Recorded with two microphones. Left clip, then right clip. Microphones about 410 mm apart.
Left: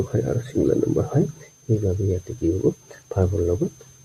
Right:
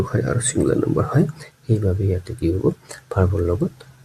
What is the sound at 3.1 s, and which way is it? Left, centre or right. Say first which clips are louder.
Speech: right 1 dB; left.